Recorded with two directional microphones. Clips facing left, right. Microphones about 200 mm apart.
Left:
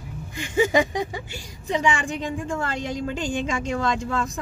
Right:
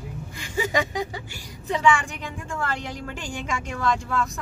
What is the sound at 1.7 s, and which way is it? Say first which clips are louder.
A woman's voice: right 1 dB; 20° left (ahead or behind).